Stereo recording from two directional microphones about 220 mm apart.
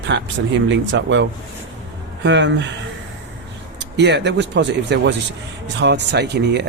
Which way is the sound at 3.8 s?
50° right (ahead or behind).